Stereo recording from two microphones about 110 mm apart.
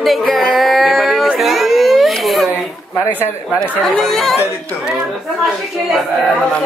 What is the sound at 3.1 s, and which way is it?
Speech, 15° right (ahead or behind).